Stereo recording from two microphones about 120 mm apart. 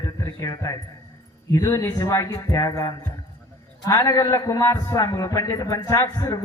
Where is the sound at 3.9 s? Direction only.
25° left (ahead or behind).